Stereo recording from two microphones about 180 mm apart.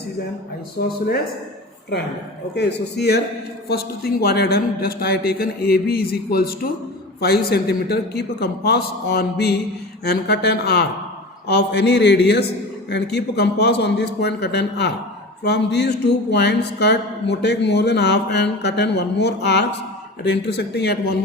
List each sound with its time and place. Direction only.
0.8 s speech: 55° left (ahead or behind)
2.6 s speech: 70° left (ahead or behind)